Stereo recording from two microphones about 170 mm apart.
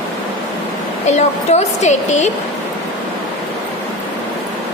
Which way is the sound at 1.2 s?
40° left (ahead or behind).